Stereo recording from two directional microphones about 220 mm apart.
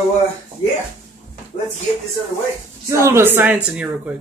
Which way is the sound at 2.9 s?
10° right (ahead or behind).